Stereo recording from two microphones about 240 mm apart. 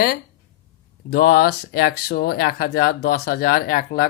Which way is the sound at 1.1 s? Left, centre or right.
Left.